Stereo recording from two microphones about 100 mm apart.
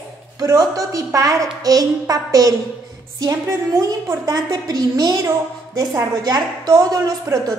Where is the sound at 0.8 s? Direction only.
35° right (ahead or behind).